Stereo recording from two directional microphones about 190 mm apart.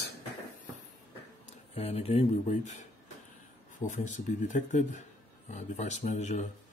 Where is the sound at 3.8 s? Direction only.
40° left (ahead or behind).